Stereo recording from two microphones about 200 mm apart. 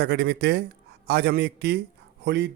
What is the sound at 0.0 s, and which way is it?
Speech, 55° right (ahead or behind).